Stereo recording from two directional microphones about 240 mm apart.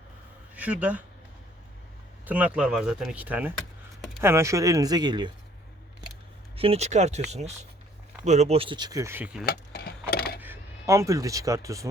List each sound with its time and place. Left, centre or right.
0.5 s speech: centre
2.2 s speech: centre
6.6 s speech: right; by 9.5 s centre
9.5 s a sound: left
10.4 s speech: centre